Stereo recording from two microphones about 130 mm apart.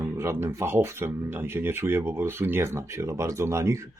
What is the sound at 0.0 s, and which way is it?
Speech, 20° right (ahead or behind).